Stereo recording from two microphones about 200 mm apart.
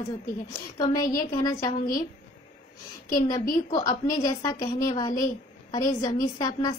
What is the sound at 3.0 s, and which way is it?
A woman's voice, 20° left (ahead or behind).